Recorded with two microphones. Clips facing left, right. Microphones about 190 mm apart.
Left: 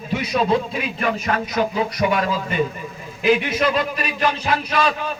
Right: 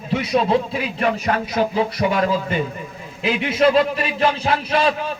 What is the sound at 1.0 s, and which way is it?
A man's voice, 30° right (ahead or behind).